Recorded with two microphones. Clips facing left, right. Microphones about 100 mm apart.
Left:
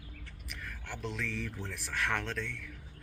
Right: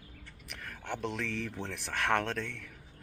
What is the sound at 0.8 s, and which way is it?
Speech, 60° right (ahead or behind).